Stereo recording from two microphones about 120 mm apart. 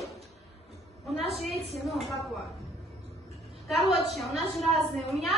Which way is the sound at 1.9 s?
Centre (ahead or behind).